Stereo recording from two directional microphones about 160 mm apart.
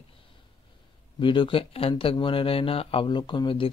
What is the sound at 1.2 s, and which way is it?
Speech, 30° left (ahead or behind).